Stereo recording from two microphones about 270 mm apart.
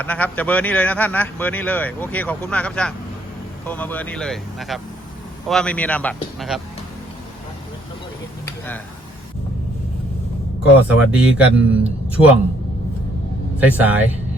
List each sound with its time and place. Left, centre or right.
0.0 s speech: centre
10.8 s speech: centre
13.6 s speech: centre